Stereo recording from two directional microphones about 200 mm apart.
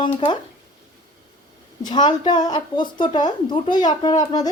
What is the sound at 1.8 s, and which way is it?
Speech, 20° left (ahead or behind).